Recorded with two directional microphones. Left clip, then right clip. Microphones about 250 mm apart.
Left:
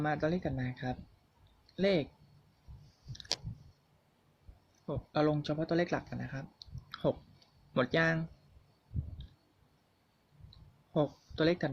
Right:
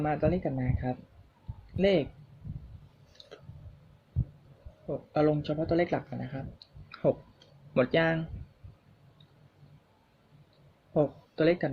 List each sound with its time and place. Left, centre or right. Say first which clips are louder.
0.0 s speech: right 4 dB; left
5.1 s speech: right 4 dB; left
7.7 s speech: right 4 dB; left
10.9 s speech: right 5 dB; left